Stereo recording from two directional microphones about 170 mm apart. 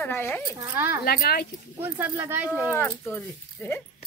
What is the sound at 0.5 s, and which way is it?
Speech, 15° right (ahead or behind).